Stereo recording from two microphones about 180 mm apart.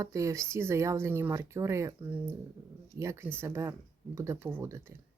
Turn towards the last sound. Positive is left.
turn(degrees=-15)  # may be behind; listen again after turning